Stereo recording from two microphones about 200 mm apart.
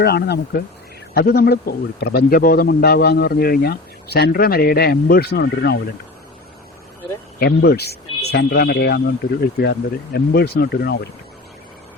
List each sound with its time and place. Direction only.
0.0 s speech: 55° left (ahead or behind)
7.3 s speech: 55° left (ahead or behind)